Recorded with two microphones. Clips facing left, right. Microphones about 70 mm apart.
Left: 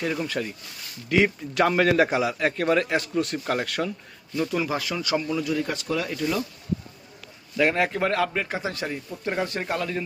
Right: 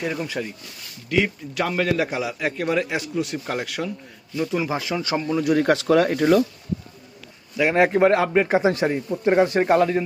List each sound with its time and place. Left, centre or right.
0.0 s speech: centre
1.1 s a man's voice: centre; by 5.4 s right
5.4 s speech: right
5.7 s speech: right
6.0 s speech: right
7.5 s a man's voice: centre
7.8 s a man's voice: right